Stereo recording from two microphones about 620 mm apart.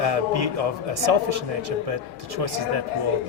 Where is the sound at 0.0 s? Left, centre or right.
Right.